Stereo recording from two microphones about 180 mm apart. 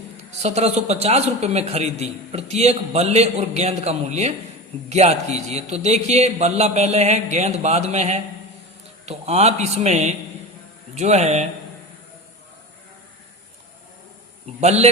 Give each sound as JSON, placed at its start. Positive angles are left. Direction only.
{"t": 0.3, "sound": "a man's voice", "side_deg": -35}
{"t": 14.6, "sound": "a man's voice", "side_deg": -35}